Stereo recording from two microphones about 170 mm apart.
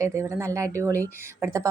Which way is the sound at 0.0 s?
15° right (ahead or behind).